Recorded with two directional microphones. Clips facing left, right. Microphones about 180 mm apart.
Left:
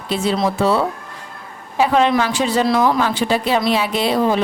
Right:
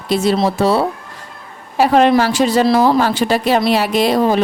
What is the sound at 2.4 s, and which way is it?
Speech, 40° right (ahead or behind).